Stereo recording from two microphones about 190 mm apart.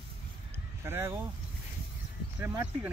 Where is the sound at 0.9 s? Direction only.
15° right (ahead or behind).